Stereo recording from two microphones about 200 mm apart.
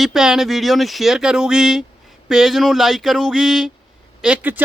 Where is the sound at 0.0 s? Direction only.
Centre (ahead or behind).